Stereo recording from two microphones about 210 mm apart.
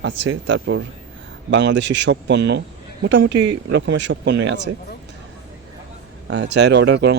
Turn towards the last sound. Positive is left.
turn(degrees=-55)  # may be behind; listen again after turning